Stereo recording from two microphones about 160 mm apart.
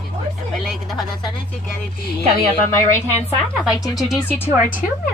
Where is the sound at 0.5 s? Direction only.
Centre (ahead or behind).